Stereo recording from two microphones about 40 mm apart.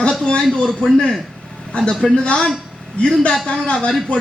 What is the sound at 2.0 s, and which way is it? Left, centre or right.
Speech, left.